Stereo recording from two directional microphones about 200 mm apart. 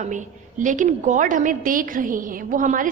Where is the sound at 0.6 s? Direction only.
40° right (ahead or behind).